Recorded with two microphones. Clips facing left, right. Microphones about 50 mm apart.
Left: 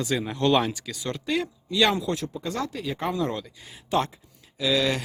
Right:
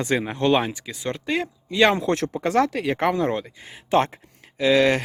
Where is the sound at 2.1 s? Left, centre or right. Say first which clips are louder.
Right 9 dB; right.